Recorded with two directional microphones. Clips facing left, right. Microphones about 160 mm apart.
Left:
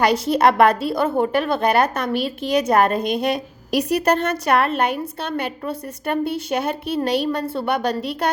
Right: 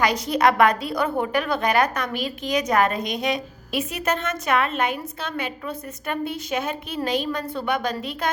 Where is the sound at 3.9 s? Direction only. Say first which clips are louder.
Left 8 dB; 40° left (ahead or behind).